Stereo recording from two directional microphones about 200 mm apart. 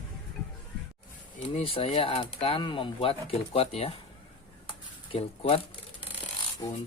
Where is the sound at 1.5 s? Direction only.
30° left (ahead or behind).